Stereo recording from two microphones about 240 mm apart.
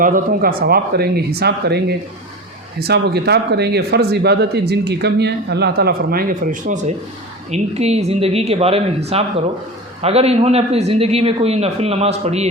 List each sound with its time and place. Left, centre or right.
0.0 s a man's voice: right